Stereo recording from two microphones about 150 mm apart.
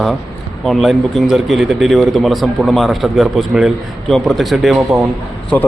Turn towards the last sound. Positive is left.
turn(degrees=10)  # may be behind; listen again after turning